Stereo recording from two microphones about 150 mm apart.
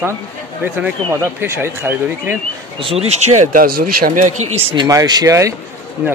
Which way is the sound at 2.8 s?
40° right (ahead or behind).